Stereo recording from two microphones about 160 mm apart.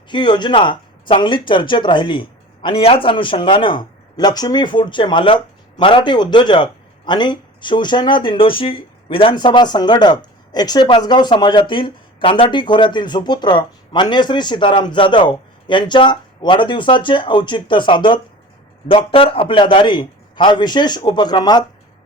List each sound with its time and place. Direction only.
0.1 s speech: 30° left (ahead or behind)